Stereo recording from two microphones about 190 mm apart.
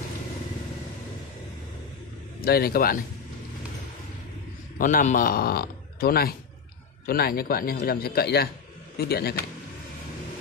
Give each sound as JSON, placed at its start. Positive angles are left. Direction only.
{"t": 2.4, "sound": "speech", "side_deg": 55}
{"t": 4.7, "sound": "speech", "side_deg": 45}